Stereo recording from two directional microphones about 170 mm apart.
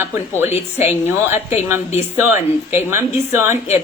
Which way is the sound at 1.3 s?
40° left (ahead or behind).